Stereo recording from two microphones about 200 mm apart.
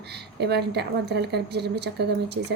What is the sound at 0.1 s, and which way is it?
A woman's voice, 55° right (ahead or behind).